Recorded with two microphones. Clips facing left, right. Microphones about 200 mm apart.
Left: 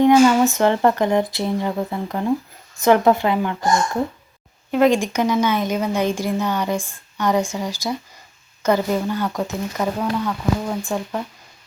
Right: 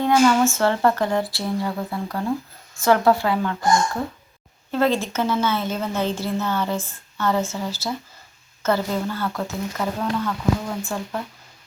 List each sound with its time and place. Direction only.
0.0 s speech: 20° left (ahead or behind)
4.7 s a woman's voice: 15° left (ahead or behind)